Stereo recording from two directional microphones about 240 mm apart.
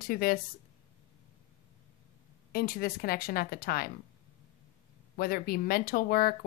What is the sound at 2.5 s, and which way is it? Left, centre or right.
Speech, left.